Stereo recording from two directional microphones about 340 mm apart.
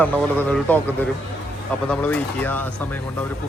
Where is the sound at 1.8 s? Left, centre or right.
Centre.